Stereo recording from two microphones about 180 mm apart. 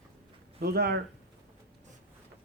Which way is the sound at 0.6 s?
60° right (ahead or behind).